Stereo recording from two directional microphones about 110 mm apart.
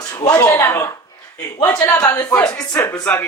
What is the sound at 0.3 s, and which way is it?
Speech, 25° left (ahead or behind).